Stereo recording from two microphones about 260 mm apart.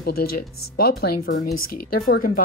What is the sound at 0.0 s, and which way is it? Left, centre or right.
Speech, left.